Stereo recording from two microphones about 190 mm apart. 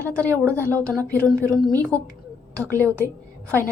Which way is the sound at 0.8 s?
5° left (ahead or behind).